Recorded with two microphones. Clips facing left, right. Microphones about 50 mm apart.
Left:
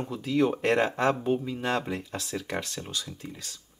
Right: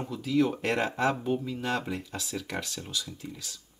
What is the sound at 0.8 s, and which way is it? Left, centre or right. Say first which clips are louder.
Speech: left 2 dB; left.